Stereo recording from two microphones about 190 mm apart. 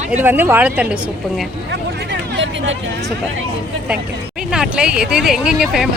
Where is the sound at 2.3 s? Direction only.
70° right (ahead or behind).